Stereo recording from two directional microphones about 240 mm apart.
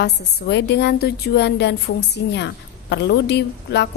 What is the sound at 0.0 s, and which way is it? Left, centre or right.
A woman's voice, left.